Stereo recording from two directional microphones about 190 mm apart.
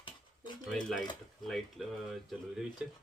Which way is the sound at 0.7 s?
Centre (ahead or behind).